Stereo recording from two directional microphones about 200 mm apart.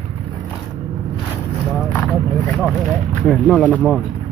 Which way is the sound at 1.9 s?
10° left (ahead or behind).